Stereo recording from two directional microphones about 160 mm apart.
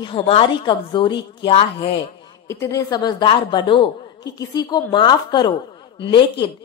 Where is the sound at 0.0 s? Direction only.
35° left (ahead or behind).